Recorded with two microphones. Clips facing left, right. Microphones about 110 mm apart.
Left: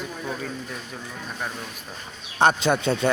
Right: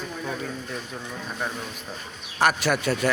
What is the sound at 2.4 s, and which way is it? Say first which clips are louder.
Speech: left 3 dB; 25° left (ahead or behind).